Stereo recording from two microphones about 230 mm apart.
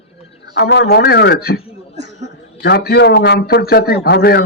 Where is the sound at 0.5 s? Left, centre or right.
Left.